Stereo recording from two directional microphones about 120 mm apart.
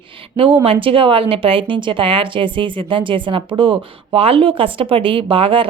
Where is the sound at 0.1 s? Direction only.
45° right (ahead or behind).